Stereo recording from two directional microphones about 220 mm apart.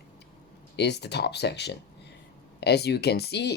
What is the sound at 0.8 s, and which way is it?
Speech, 50° left (ahead or behind).